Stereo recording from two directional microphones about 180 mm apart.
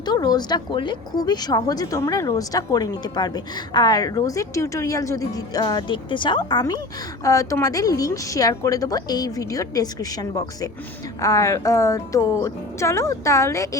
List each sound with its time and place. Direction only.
0.0 s speech: 20° left (ahead or behind)